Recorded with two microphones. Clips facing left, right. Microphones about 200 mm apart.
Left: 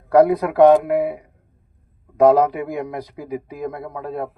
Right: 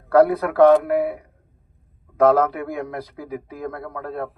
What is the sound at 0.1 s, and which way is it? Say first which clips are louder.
A man's voice: left 1 dB; 15° left (ahead or behind).